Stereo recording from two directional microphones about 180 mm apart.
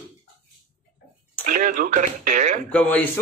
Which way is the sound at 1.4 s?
50° right (ahead or behind).